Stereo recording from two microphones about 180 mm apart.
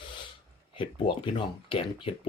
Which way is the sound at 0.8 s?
25° left (ahead or behind).